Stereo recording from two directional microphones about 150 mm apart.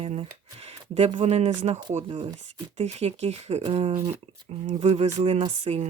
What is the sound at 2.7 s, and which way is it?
Speech, 45° right (ahead or behind).